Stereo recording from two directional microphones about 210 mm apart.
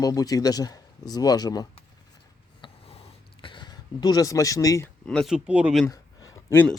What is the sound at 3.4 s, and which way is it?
Speech, 25° left (ahead or behind).